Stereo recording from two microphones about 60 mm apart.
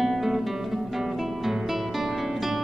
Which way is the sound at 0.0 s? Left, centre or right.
Centre.